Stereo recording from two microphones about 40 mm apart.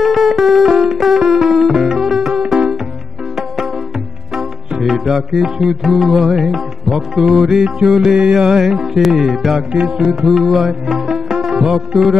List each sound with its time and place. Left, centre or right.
0.0 s music: centre
4.8 s music: centre
9.7 s music: right
9.9 s music: centre